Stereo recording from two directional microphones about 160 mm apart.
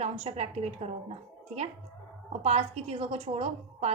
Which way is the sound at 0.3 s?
40° right (ahead or behind).